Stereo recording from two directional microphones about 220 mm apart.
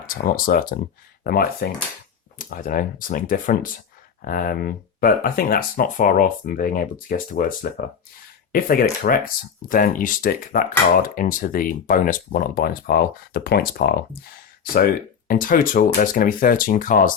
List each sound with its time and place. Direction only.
0.0 s speech: 40° left (ahead or behind)